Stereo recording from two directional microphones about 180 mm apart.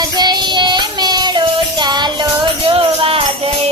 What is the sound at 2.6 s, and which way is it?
Music, 30° right (ahead or behind).